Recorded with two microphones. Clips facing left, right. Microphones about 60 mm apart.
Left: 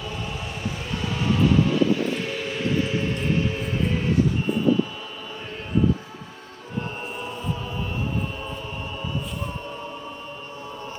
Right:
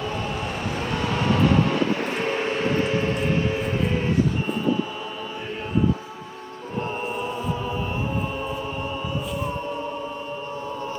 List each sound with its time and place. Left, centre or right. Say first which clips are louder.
0.9 s vehicle: right 1 dB; right